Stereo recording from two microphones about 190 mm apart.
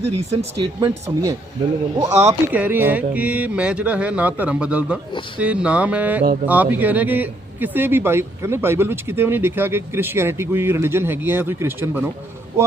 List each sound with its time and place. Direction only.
0.0 s speech: 35° right (ahead or behind)
0.8 s speech: 20° right (ahead or behind)
2.5 s a man's voice: 10° right (ahead or behind)